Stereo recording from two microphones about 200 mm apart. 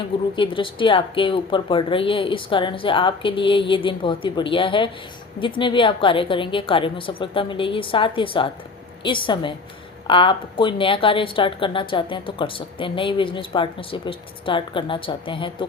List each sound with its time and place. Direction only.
0.3 s a woman's voice: 25° left (ahead or behind)